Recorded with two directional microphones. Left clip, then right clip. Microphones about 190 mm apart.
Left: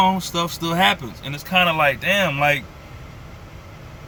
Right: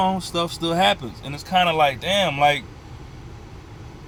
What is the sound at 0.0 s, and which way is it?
Speech, 20° left (ahead or behind).